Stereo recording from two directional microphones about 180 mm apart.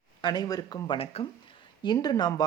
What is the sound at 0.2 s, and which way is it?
Speech, 25° left (ahead or behind).